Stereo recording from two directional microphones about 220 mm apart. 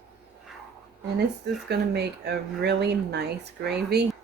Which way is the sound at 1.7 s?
50° right (ahead or behind).